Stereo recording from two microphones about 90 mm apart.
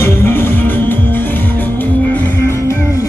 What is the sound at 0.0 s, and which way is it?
Music, 25° left (ahead or behind).